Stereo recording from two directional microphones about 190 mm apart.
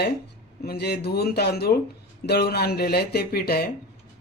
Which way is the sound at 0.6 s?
55° left (ahead or behind).